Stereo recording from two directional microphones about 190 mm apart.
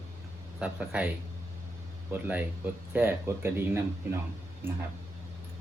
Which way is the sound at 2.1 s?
10° right (ahead or behind).